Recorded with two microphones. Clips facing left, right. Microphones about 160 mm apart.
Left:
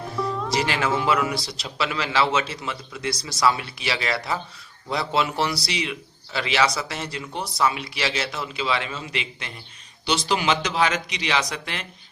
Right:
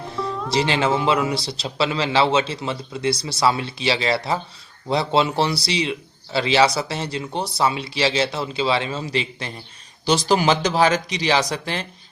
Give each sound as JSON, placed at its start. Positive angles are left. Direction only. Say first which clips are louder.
{"t": 0.0, "sound": "music", "louder": "even", "side_deg": 0}
{"t": 0.5, "sound": "a man's voice", "louder": "right 5 dB", "side_deg": -25}